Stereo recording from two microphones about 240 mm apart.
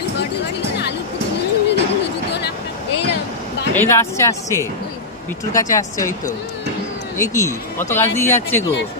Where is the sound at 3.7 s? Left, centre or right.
Centre.